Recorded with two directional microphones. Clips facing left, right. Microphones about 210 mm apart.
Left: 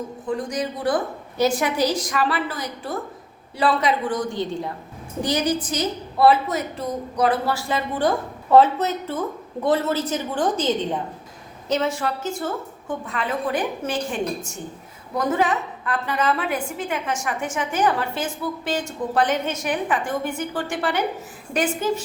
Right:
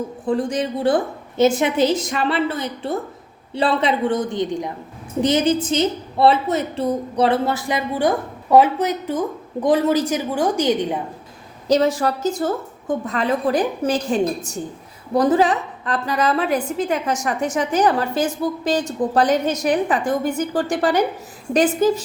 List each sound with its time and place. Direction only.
0.3 s a woman's voice: 30° right (ahead or behind); by 11.0 s 10° right (ahead or behind)
11.7 s a woman's voice: 35° right (ahead or behind)